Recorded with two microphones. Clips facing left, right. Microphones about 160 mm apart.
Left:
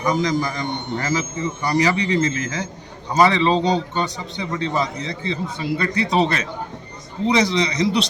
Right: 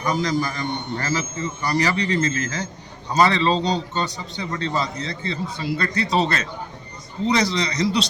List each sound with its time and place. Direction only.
0.0 s a man's voice: 20° left (ahead or behind)